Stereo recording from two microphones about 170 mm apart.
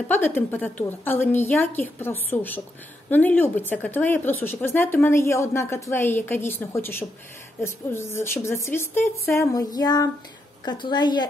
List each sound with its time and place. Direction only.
0.1 s speech: 10° left (ahead or behind)